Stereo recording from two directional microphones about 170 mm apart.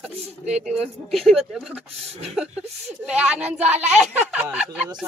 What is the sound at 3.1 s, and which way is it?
Speech, 5° right (ahead or behind).